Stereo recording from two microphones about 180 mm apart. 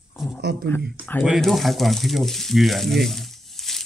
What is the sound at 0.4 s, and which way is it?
Speech, 70° right (ahead or behind).